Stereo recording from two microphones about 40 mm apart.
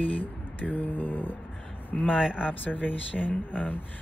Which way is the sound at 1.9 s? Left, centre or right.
Left.